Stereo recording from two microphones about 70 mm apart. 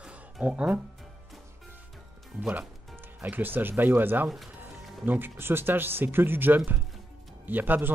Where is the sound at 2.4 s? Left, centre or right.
Right.